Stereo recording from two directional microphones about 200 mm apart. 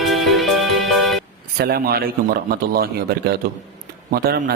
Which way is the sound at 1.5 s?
50° right (ahead or behind).